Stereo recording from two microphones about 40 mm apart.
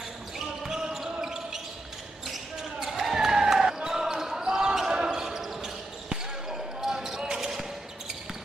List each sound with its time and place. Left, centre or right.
0.7 s basketball bounce: centre
2.8 s basketball bounce: centre